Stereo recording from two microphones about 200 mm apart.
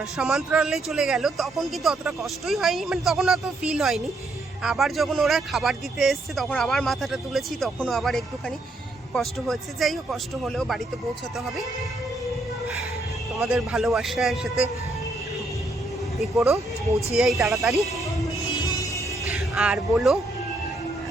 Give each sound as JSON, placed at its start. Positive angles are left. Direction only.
{"t": 0.0, "sound": "speech", "side_deg": -5}
{"t": 13.4, "sound": "speech", "side_deg": 0}
{"t": 16.1, "sound": "speech", "side_deg": 0}
{"t": 18.8, "sound": "music", "side_deg": 15}
{"t": 19.4, "sound": "speech", "side_deg": -5}